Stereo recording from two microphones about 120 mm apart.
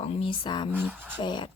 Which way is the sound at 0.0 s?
55° left (ahead or behind).